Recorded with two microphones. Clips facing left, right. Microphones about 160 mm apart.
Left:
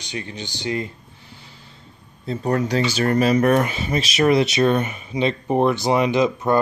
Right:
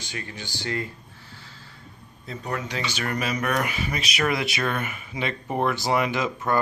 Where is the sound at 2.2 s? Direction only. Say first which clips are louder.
Left 10 dB; 35° left (ahead or behind).